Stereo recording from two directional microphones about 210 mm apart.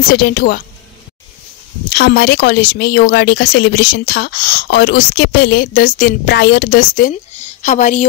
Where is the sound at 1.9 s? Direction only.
50° left (ahead or behind).